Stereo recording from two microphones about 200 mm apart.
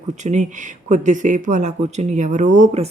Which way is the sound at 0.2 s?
35° right (ahead or behind).